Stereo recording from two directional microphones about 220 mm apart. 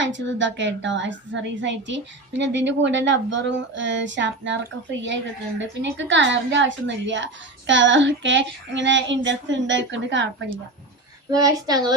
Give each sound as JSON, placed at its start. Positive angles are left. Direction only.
{"t": 0.0, "sound": "female singing", "side_deg": -55}
{"t": 11.3, "sound": "speech", "side_deg": -15}